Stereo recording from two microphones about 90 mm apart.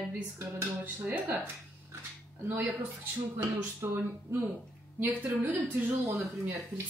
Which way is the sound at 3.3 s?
25° right (ahead or behind).